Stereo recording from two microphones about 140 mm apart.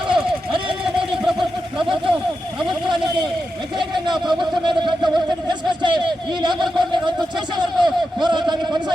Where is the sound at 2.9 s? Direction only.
35° right (ahead or behind).